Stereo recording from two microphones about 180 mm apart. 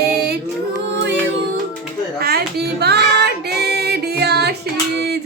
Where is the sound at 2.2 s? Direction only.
60° right (ahead or behind).